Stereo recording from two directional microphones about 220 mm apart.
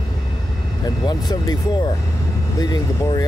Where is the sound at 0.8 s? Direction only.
15° left (ahead or behind).